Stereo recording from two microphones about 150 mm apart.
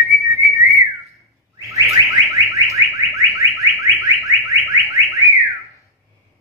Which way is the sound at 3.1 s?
20° right (ahead or behind).